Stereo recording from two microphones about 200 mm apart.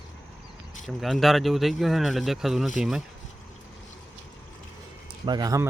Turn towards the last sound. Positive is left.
turn(degrees=-20)  # may be behind; listen again after turning